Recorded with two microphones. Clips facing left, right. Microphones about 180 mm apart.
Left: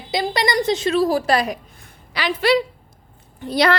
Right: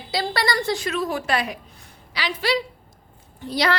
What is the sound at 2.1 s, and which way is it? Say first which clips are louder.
A woman's voice: left 6 dB; 55° left (ahead or behind).